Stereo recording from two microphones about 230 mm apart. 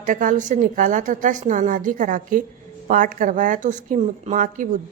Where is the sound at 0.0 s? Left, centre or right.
Right.